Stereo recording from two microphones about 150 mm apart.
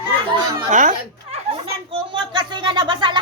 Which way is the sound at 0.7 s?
60° right (ahead or behind).